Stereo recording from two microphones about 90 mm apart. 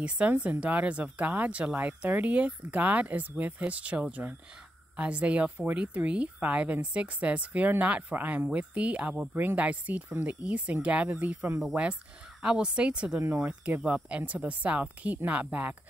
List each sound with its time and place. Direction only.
0.0 s a woman's voice: 15° right (ahead or behind)